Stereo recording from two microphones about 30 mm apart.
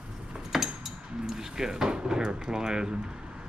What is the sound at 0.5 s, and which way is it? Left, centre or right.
Cutlery, centre.